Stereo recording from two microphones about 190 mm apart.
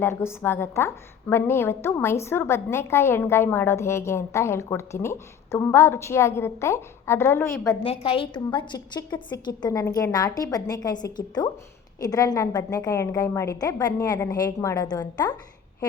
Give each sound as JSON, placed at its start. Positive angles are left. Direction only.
{"t": 0.0, "sound": "a woman's voice", "side_deg": 15}
{"t": 7.9, "sound": "a woman's voice", "side_deg": 30}